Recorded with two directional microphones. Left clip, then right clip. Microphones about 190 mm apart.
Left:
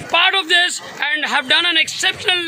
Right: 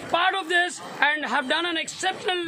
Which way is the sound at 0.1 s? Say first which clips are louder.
Left 8 dB; 35° left (ahead or behind).